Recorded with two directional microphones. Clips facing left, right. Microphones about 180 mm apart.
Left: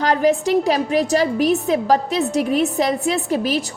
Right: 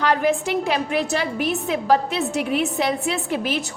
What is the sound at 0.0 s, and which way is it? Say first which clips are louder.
A woman's voice: left 3 dB; 35° left (ahead or behind).